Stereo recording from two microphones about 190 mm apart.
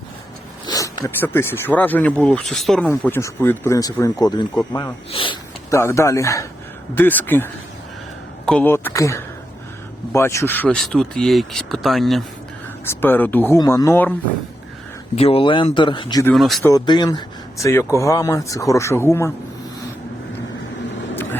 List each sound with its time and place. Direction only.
0.7 s speech: 20° left (ahead or behind); by 2.9 s centre (ahead or behind)
3.0 s speech: 15° left (ahead or behind)
5.7 s speech: 15° left (ahead or behind)
12.8 s speech: 10° left (ahead or behind)
15.1 s speech: 30° left (ahead or behind)
16.2 s speech: centre (ahead or behind)
16.6 s speech: 20° left (ahead or behind)